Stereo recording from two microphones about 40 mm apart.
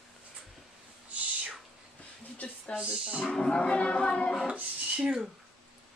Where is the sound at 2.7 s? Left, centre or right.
Right.